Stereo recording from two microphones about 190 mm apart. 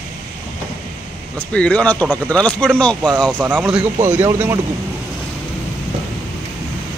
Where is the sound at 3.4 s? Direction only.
5° right (ahead or behind).